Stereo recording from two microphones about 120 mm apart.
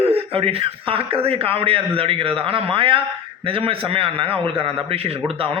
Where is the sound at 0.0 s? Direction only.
55° right (ahead or behind).